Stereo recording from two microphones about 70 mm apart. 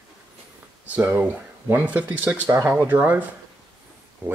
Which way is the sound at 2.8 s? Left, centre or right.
Right.